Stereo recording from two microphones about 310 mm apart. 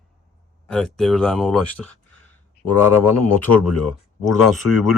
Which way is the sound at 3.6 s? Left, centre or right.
Left.